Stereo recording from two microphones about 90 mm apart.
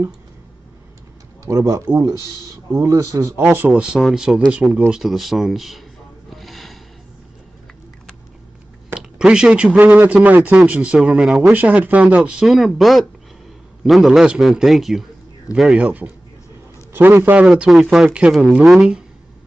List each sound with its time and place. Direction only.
1.4 s speech: 35° right (ahead or behind)
3.3 s speech: 25° right (ahead or behind); by 5.9 s centre (ahead or behind)
6.3 s a sound: centre (ahead or behind)
8.9 s speech: 10° right (ahead or behind)
11.5 s speech: 15° right (ahead or behind)
15.8 s speech: 15° right (ahead or behind)
17.5 s speech: centre (ahead or behind)